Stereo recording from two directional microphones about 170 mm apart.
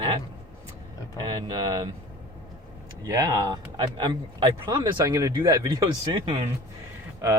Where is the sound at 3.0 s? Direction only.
20° right (ahead or behind).